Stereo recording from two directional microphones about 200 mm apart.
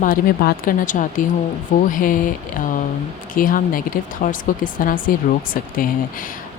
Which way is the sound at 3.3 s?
45° left (ahead or behind).